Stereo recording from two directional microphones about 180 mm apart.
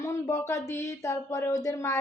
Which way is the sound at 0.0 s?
15° left (ahead or behind).